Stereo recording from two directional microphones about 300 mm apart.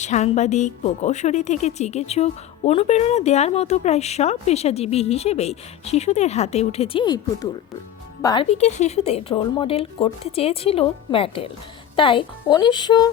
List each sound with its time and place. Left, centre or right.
0.0 s a woman's voice: left
8.2 s a woman's voice: centre